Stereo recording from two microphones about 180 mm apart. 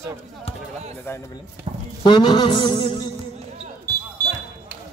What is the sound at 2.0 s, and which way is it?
Speech, 25° left (ahead or behind).